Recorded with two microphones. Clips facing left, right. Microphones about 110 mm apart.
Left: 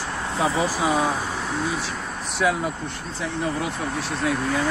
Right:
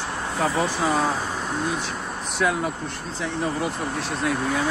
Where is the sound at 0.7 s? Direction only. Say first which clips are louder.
Left 1 dB; 5° left (ahead or behind).